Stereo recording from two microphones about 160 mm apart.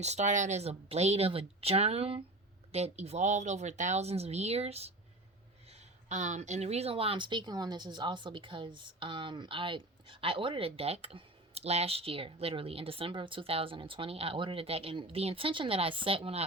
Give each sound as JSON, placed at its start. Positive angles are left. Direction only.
{"t": 0.0, "sound": "speech", "side_deg": -45}